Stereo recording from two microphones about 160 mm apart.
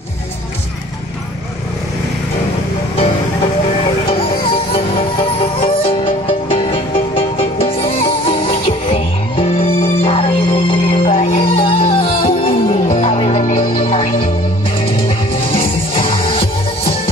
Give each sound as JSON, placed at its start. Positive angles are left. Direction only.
{"t": 5.6, "sound": "music", "side_deg": 35}
{"t": 12.8, "sound": "music", "side_deg": 50}
{"t": 15.9, "sound": "music", "side_deg": 35}